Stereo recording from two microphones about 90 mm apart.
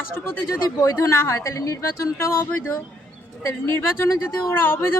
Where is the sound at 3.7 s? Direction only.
30° left (ahead or behind).